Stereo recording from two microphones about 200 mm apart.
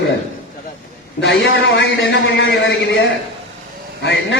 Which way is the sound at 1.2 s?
60° left (ahead or behind).